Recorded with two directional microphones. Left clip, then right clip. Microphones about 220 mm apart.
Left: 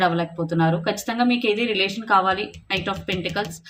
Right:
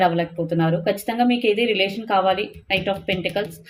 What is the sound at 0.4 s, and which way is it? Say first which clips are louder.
A woman's voice: even; 15° left (ahead or behind).